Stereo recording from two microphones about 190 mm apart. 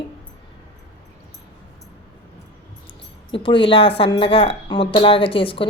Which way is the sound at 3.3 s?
30° left (ahead or behind).